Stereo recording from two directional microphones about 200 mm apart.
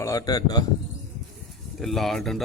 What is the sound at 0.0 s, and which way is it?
Speech, 15° left (ahead or behind).